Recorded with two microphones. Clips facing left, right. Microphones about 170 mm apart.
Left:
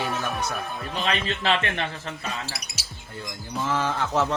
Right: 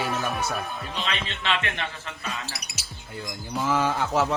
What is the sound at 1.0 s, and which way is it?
A man's voice, 35° left (ahead or behind).